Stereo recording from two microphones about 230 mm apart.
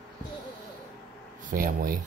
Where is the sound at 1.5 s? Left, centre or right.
Right.